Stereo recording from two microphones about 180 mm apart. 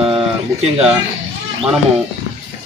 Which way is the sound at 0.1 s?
35° right (ahead or behind).